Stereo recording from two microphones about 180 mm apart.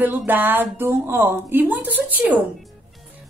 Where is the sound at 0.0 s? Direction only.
10° right (ahead or behind).